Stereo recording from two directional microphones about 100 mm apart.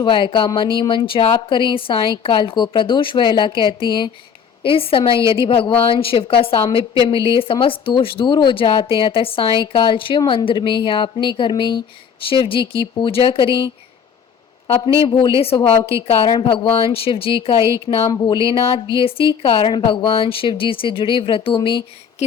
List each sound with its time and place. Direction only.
0.0 s speech: 55° left (ahead or behind)
15.0 s speech: 60° left (ahead or behind)
18.1 s speech: 60° left (ahead or behind)